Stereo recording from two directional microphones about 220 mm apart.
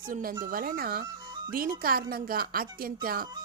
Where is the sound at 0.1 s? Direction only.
40° right (ahead or behind).